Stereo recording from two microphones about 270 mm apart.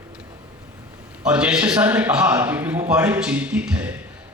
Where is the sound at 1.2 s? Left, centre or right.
Centre.